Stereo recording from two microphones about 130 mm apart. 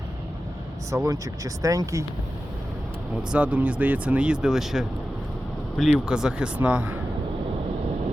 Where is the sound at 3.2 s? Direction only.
10° right (ahead or behind).